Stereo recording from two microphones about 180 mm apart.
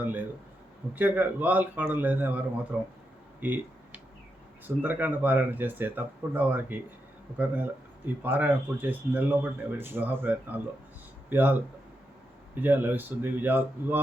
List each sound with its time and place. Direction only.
0.0 s speech: 10° right (ahead or behind)
3.4 s a sound: 10° right (ahead or behind)
4.6 s speech: 10° right (ahead or behind)